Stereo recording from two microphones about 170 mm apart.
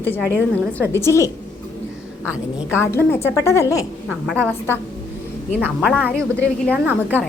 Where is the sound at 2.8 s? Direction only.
15° left (ahead or behind).